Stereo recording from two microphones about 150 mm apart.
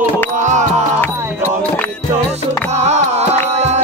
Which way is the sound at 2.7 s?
50° right (ahead or behind).